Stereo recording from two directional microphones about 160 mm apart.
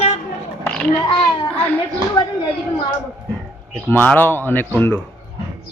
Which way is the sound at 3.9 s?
10° left (ahead or behind).